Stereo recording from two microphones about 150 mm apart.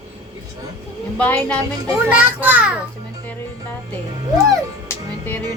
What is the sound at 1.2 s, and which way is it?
Speech, 10° left (ahead or behind).